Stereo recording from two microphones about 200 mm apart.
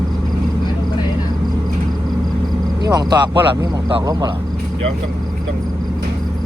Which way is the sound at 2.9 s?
20° right (ahead or behind).